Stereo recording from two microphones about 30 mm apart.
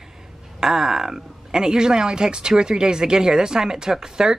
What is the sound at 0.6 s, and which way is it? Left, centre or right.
A woman's voice, centre.